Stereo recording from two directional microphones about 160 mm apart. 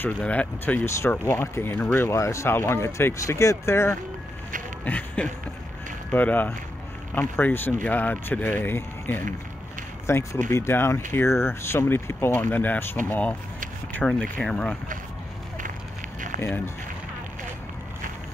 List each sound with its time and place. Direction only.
0.0 s speech: 10° left (ahead or behind)
16.3 s speech: 15° left (ahead or behind)